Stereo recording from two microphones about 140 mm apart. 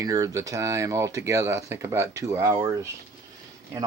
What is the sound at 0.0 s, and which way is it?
Speech, 25° right (ahead or behind).